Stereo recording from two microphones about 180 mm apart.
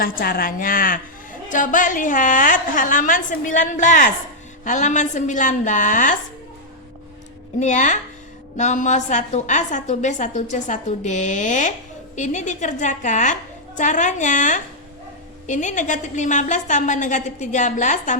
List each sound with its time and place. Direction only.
0.0 s a woman's voice: 55° left (ahead or behind)
7.6 s a woman's voice: 45° left (ahead or behind)